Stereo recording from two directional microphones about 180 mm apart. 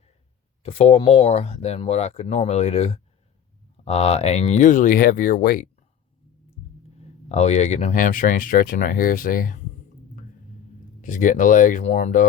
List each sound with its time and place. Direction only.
0.6 s speech: 35° left (ahead or behind); by 5.6 s 55° left (ahead or behind)
7.0 s speech: 35° left (ahead or behind)
11.0 s speech: 45° left (ahead or behind)